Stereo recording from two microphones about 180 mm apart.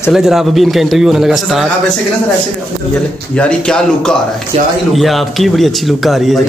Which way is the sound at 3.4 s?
5° left (ahead or behind).